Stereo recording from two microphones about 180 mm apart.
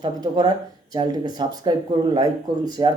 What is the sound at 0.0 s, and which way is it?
Speech, 25° right (ahead or behind).